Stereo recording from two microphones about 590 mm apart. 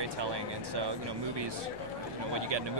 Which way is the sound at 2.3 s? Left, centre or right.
Right.